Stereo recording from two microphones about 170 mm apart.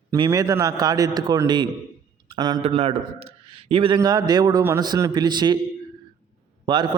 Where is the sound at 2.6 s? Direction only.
35° right (ahead or behind).